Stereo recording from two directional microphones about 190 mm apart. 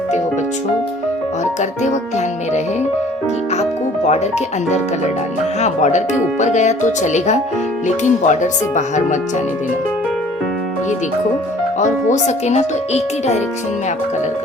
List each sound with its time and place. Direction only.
1.8 s speech: 40° left (ahead or behind)
5.5 s speech: 35° left (ahead or behind)
11.8 s speech: 40° left (ahead or behind)